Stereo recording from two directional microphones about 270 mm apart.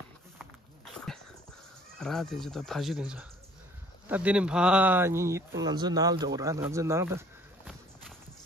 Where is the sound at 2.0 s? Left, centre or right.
Centre.